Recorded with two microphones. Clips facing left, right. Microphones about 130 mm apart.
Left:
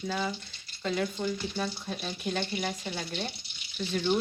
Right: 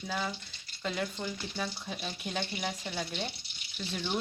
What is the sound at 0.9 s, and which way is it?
A woman's voice, centre (ahead or behind).